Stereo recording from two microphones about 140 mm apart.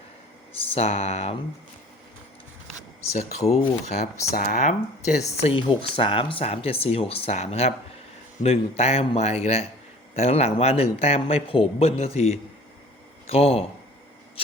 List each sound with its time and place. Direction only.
0.7 s speech: 50° left (ahead or behind)
3.1 s speech: 50° left (ahead or behind)
4.4 s speech: 65° left (ahead or behind)
5.4 s a man's voice: 40° left (ahead or behind)